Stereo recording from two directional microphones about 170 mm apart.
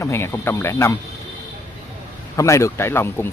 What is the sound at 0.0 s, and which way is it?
Speech, 15° left (ahead or behind).